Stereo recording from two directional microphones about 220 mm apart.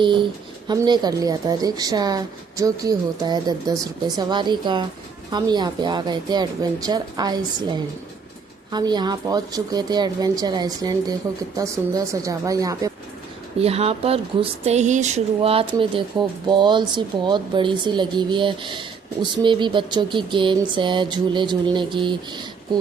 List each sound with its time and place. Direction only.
0.0 s speech: 20° right (ahead or behind)
13.6 s speech: 25° right (ahead or behind)